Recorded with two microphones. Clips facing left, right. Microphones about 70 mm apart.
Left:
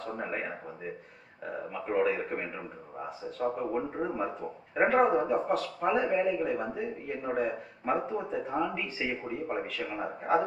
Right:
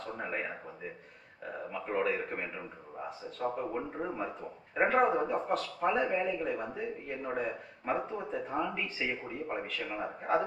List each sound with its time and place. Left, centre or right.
0.2 s speech: centre
1.7 s speech: centre